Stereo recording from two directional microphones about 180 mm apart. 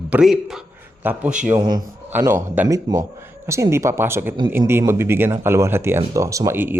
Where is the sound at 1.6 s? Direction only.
25° right (ahead or behind).